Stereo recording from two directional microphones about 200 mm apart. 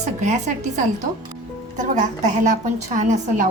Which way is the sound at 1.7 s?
40° right (ahead or behind).